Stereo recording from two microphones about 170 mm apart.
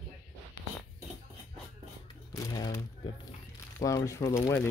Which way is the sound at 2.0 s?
20° left (ahead or behind).